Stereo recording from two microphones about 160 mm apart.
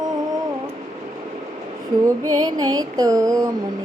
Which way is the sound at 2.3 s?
25° right (ahead or behind).